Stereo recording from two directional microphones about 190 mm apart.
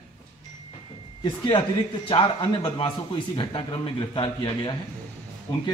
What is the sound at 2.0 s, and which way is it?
A man's voice, 25° left (ahead or behind).